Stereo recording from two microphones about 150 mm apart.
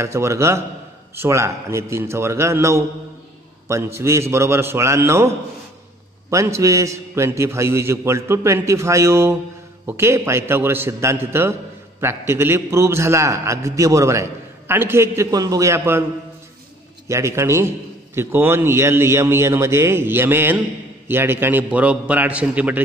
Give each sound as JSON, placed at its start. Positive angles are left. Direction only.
{"t": 0.0, "sound": "a man's voice", "side_deg": -20}
{"t": 6.3, "sound": "a man's voice", "side_deg": -20}
{"t": 17.1, "sound": "a man's voice", "side_deg": -20}